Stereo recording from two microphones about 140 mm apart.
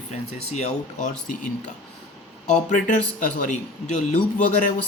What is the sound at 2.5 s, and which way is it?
A man's voice, 65° left (ahead or behind).